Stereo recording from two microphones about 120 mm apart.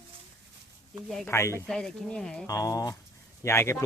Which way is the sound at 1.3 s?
20° left (ahead or behind).